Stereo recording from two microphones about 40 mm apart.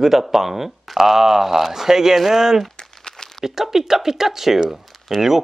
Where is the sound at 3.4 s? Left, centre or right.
Centre.